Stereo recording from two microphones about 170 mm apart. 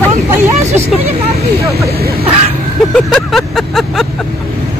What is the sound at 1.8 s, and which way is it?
Speech, 65° right (ahead or behind).